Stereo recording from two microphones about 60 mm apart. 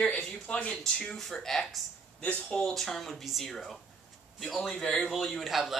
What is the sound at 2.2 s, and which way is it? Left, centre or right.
Speech, left.